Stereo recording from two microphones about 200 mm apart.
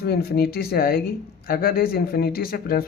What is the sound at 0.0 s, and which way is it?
Speech, 50° left (ahead or behind).